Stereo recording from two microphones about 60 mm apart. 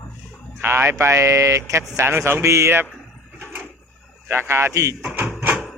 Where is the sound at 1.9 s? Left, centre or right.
Right.